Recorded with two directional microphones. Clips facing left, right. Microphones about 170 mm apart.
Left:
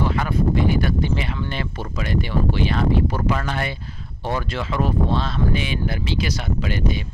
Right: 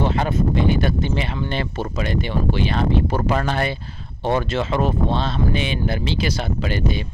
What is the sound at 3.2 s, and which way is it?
Speech, 35° right (ahead or behind).